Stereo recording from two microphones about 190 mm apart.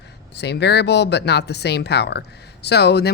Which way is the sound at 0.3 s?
60° left (ahead or behind).